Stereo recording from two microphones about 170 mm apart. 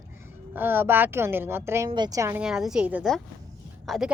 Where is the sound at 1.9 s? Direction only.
25° right (ahead or behind).